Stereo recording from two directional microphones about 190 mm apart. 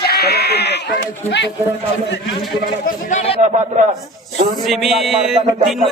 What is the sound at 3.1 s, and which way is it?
Speech, 40° left (ahead or behind).